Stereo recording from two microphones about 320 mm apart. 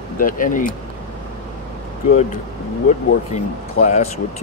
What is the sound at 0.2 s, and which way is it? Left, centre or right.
Speech, left.